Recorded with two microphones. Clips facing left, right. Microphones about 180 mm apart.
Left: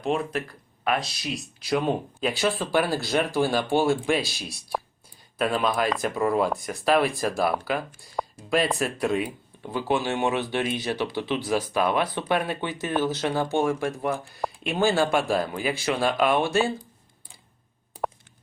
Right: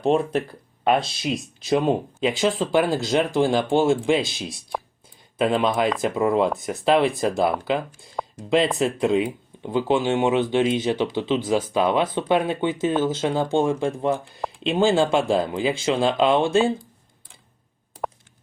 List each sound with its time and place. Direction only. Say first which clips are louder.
0.0 s speech: right 6 dB; 30° right (ahead or behind)